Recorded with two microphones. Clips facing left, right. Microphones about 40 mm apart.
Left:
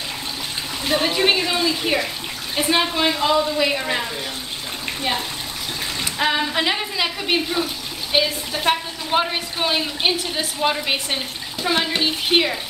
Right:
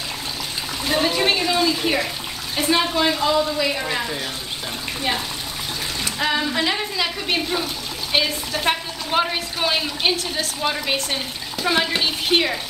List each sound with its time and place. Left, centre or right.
0.8 s a woman's voice: centre
6.1 s a woman's voice: centre